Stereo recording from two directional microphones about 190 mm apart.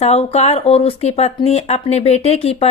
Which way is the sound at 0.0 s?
35° left (ahead or behind).